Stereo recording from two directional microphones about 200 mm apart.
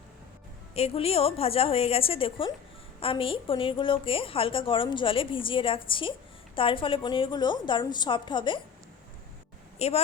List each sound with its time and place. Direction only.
0.8 s a woman's voice: 30° left (ahead or behind)
9.7 s speech: 30° left (ahead or behind)